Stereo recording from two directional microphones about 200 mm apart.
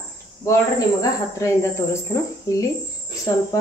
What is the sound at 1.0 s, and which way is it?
Speech, 15° left (ahead or behind).